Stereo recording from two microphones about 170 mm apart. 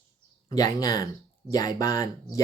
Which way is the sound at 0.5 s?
20° left (ahead or behind).